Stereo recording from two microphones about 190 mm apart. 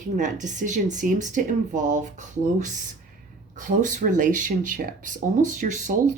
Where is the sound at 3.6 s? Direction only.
45° right (ahead or behind).